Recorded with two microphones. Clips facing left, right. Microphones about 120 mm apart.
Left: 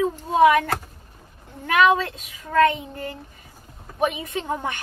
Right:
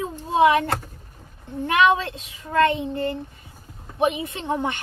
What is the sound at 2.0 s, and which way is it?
A child's voice, 30° right (ahead or behind).